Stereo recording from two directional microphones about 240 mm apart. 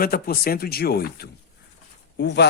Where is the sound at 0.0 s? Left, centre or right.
Left.